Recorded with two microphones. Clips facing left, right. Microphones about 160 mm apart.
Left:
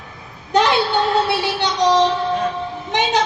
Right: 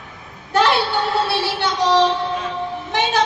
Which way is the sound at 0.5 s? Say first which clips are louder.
Left 1 dB; 20° left (ahead or behind).